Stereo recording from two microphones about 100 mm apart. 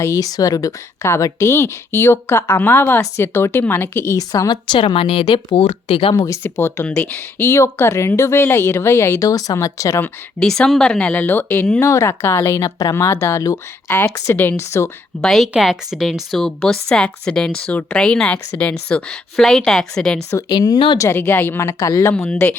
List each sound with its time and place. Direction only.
0.0 s speech: 35° left (ahead or behind)
4.2 s speech: 40° left (ahead or behind); by 6.1 s 70° left (ahead or behind)
6.1 s speech: 35° left (ahead or behind)
6.8 s speech: 10° left (ahead or behind); by 10.0 s 35° left (ahead or behind)
10.4 s speech: 5° left (ahead or behind)
11.8 s speech: 30° left (ahead or behind)
15.2 s speech: 5° left (ahead or behind)
20.5 s speech: 45° left (ahead or behind)
20.7 s speech: 65° left (ahead or behind)
21.0 s speech: 25° left (ahead or behind)
21.7 s speech: 35° left (ahead or behind)
22.1 s speech: 10° left (ahead or behind)